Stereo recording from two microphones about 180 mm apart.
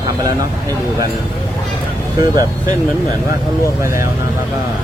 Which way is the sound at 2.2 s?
20° right (ahead or behind).